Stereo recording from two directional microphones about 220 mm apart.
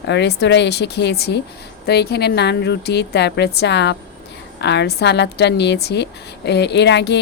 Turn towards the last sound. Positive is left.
turn(degrees=50)  # may be behind; listen again after turning